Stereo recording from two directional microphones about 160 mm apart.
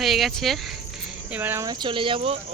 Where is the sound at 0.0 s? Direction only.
Centre (ahead or behind).